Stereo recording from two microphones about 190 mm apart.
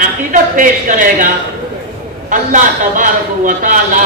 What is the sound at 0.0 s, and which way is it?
A woman's voice, 45° right (ahead or behind).